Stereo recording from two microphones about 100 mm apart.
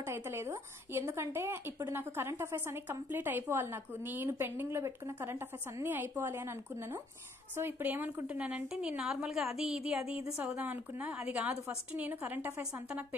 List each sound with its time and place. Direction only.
0.0 s a woman's voice: 25° right (ahead or behind)